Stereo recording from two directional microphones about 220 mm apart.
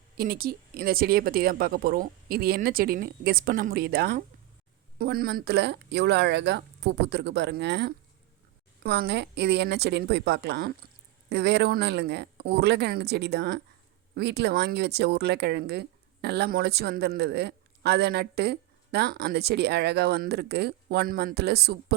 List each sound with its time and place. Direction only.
0.2 s speech: 45° right (ahead or behind)